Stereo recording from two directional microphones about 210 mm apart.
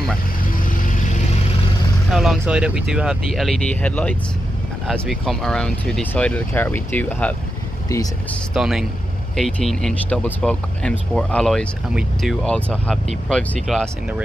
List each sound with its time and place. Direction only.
0.7 s vehicle: 40° left (ahead or behind)
2.0 s speech: centre (ahead or behind); by 8.4 s 15° left (ahead or behind)
8.5 s speech: centre (ahead or behind)